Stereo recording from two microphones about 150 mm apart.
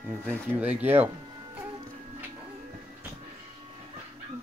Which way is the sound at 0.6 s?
10° right (ahead or behind).